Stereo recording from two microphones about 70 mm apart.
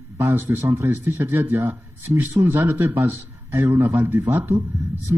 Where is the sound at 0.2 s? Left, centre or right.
Right.